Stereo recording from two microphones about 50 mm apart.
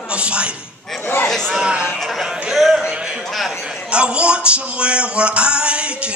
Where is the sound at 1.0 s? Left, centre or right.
Left.